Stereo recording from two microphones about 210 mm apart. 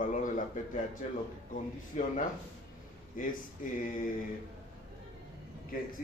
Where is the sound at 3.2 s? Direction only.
40° left (ahead or behind).